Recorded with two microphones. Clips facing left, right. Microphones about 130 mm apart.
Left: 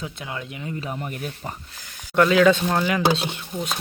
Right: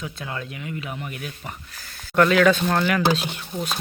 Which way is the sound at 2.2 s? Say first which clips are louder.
Left 1 dB; 20° left (ahead or behind).